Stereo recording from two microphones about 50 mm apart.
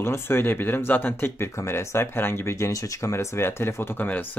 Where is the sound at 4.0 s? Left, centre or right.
Left.